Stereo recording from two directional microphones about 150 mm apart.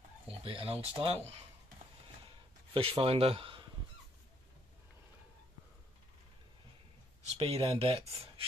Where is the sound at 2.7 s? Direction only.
35° right (ahead or behind).